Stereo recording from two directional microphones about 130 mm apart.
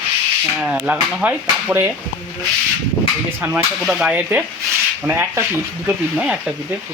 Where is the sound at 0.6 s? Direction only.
5° right (ahead or behind).